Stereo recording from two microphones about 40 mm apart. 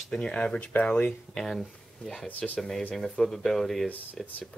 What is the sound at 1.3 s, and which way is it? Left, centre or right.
Speech, centre.